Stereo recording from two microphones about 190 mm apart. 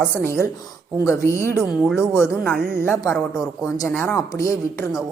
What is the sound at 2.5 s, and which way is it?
Speech, 50° right (ahead or behind).